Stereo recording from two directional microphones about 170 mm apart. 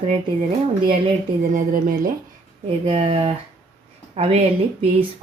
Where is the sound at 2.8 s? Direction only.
30° right (ahead or behind).